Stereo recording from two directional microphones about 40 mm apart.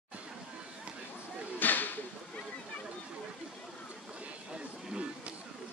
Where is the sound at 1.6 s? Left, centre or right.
Left.